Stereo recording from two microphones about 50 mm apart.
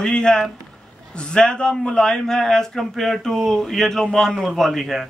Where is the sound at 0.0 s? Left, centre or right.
Centre.